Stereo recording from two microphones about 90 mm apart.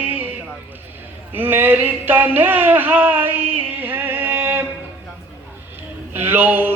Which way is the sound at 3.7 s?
20° right (ahead or behind).